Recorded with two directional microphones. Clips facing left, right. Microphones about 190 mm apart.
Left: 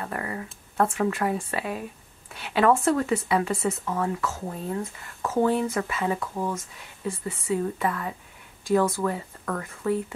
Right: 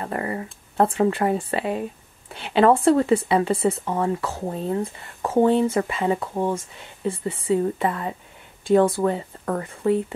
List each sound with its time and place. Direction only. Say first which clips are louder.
0.0 s speech: right 5 dB; 30° right (ahead or behind)